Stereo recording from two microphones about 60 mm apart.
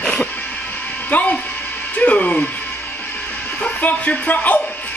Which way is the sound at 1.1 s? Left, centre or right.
Left.